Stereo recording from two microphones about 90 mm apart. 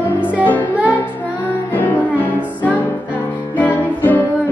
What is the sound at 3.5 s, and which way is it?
Music, 20° left (ahead or behind).